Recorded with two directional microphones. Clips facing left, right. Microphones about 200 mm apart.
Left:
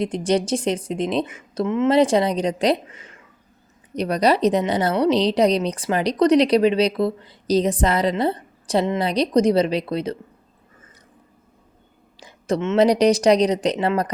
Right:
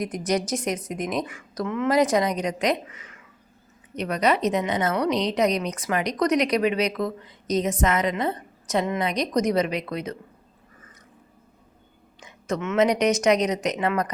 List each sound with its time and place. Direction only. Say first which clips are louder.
0.0 s a woman's voice: left 5 dB; 30° left (ahead or behind)
12.2 s a woman's voice: left 5 dB; 30° left (ahead or behind)